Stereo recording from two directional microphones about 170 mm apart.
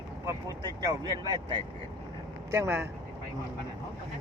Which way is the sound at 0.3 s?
20° right (ahead or behind).